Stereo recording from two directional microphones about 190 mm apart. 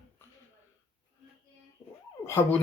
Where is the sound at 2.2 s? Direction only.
10° left (ahead or behind).